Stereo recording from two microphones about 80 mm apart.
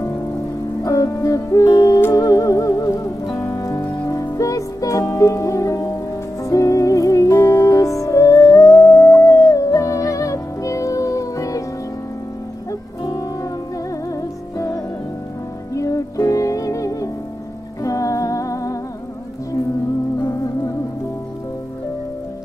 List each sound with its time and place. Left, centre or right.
0.8 s music: left
14.1 s music: left
20.2 s music: left